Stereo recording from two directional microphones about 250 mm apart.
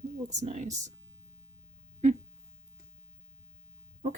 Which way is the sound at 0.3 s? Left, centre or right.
Right.